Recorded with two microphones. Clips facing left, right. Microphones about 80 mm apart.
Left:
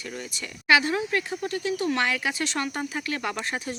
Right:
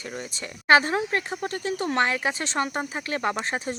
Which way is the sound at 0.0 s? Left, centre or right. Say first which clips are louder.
Right 1 dB; right.